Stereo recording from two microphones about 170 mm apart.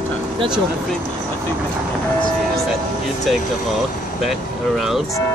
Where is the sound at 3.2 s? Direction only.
Centre (ahead or behind).